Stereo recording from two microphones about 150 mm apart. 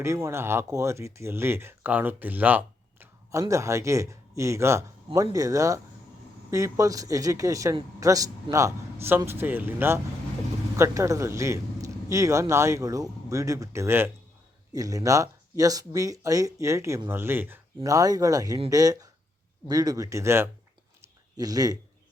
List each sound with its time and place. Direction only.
0.0 s a man's voice: 20° right (ahead or behind)